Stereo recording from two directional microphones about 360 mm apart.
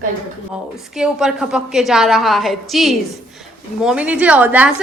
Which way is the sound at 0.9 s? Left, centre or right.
Centre.